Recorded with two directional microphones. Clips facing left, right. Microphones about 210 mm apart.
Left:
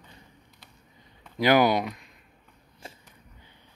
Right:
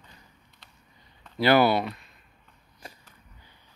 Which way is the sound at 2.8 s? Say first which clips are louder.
Left 1 dB; 25° left (ahead or behind).